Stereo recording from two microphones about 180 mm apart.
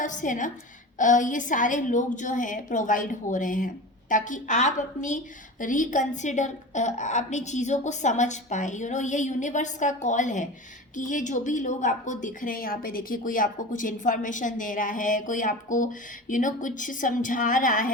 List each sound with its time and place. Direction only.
0.0 s a woman's voice: 45° left (ahead or behind)